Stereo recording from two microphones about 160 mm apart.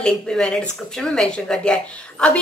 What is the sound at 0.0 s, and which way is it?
A woman's voice, 5° left (ahead or behind).